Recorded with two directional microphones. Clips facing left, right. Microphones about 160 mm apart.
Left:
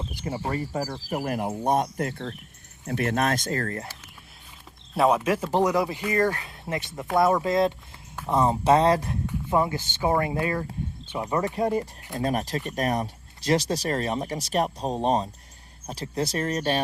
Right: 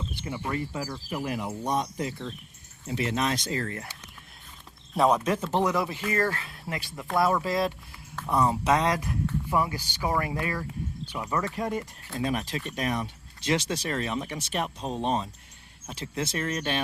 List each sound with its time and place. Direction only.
0.2 s speech: 35° left (ahead or behind)
0.9 s speech: 70° left (ahead or behind)
1.2 s speech: 50° left (ahead or behind)
4.9 s speech: 5° left (ahead or behind); by 11.9 s 30° left (ahead or behind)
12.2 s speech: 45° left (ahead or behind)